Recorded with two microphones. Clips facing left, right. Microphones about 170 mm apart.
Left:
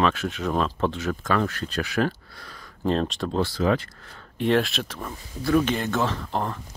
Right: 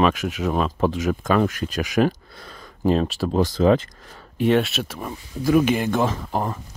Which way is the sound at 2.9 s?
5° right (ahead or behind).